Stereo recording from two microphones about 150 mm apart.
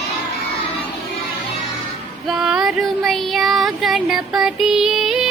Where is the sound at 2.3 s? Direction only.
5° right (ahead or behind).